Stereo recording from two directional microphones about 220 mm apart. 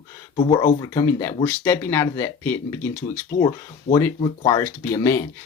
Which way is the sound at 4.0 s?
15° left (ahead or behind).